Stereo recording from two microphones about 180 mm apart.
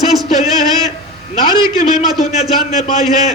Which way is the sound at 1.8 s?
40° left (ahead or behind).